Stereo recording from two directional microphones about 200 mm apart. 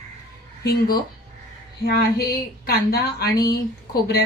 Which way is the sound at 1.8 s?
50° left (ahead or behind).